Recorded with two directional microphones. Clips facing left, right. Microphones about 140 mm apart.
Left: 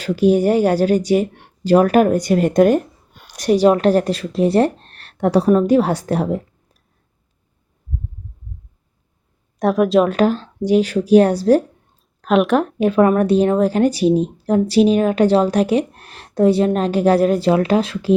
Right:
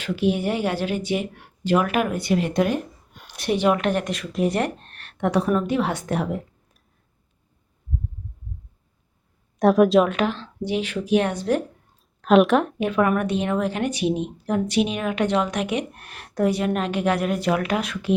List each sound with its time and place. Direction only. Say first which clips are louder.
0.0 s speech: left 8 dB; 40° left (ahead or behind)
9.6 s a woman's voice: left 1 dB; centre (ahead or behind)
10.1 s speech: left 8 dB; 40° left (ahead or behind)
12.2 s a woman's voice: left 1 dB; centre (ahead or behind)
12.6 s speech: left 7 dB; 35° left (ahead or behind)